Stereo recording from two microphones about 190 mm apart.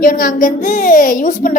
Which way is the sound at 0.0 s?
45° left (ahead or behind).